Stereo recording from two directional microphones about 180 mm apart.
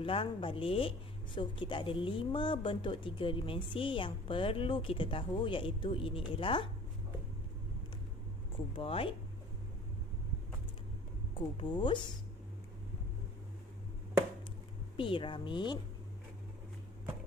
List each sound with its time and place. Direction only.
0.0 s speech: 30° left (ahead or behind)
8.7 s speech: 30° left (ahead or behind)
11.3 s speech: 30° left (ahead or behind)
15.0 s speech: 30° left (ahead or behind)